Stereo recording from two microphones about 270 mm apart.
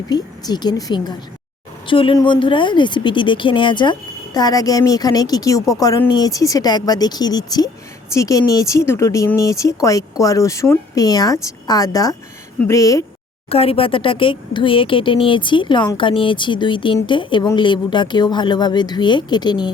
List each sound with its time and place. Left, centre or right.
0.1 s speech: centre